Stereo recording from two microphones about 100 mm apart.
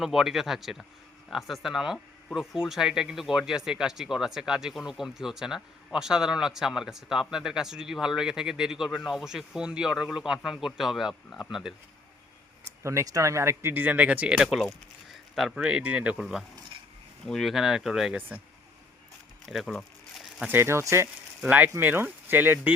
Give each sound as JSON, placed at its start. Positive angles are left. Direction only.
{"t": 0.0, "sound": "speech", "side_deg": -5}
{"t": 12.8, "sound": "speech", "side_deg": -30}
{"t": 15.1, "sound": "a sound", "side_deg": 0}
{"t": 15.6, "sound": "speech", "side_deg": -15}
{"t": 17.2, "sound": "speech", "side_deg": 5}
{"t": 19.5, "sound": "a sound", "side_deg": 0}
{"t": 20.5, "sound": "speech", "side_deg": -25}
{"t": 21.4, "sound": "speech", "side_deg": -15}